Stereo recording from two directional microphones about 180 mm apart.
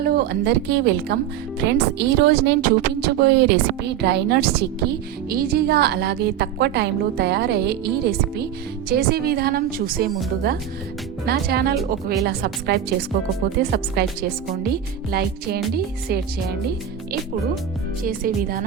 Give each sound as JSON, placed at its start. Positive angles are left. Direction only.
{"t": 0.1, "sound": "a woman's voice", "side_deg": -60}
{"t": 11.3, "sound": "a woman's voice", "side_deg": -60}
{"t": 18.0, "sound": "speech", "side_deg": -55}